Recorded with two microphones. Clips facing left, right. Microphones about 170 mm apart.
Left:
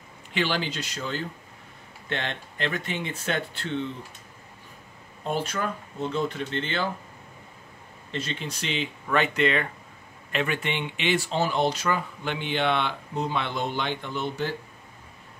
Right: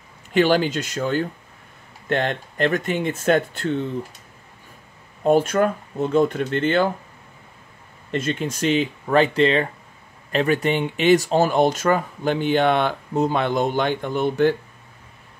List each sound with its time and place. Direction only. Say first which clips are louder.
0.3 s speech: right 10 dB; 45° right (ahead or behind)
5.2 s speech: right 11 dB; 50° right (ahead or behind)
8.1 s speech: right 9 dB; 50° right (ahead or behind)